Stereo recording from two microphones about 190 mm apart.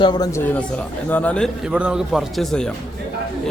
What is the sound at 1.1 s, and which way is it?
Speech, 10° left (ahead or behind).